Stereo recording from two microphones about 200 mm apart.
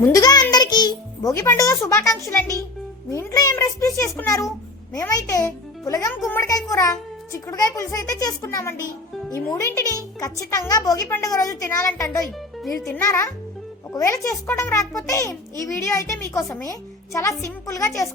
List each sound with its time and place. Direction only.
0.0 s music: 20° left (ahead or behind)
2.2 s a woman's voice: 15° left (ahead or behind)